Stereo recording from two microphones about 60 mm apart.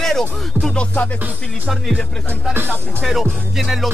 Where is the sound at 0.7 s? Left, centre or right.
Left.